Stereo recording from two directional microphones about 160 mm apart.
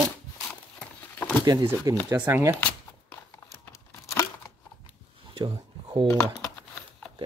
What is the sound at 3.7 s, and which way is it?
Tearing, 15° left (ahead or behind).